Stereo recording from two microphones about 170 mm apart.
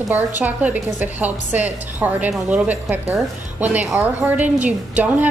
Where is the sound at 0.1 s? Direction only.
10° right (ahead or behind).